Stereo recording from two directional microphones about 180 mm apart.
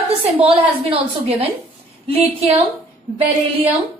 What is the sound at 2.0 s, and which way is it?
Speech, 35° right (ahead or behind).